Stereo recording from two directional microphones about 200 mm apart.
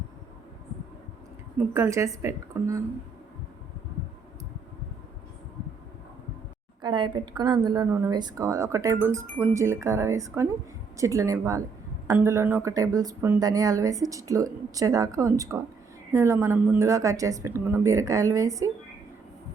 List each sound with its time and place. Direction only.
1.5 s speech: 15° right (ahead or behind)
6.8 s speech: 20° right (ahead or behind)